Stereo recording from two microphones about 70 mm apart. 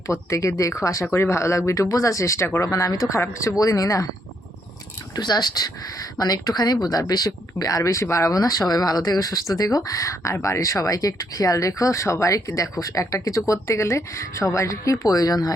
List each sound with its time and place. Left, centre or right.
0.1 s speech: left
1.0 s speech: left
3.2 s speech: left
5.1 s speech: left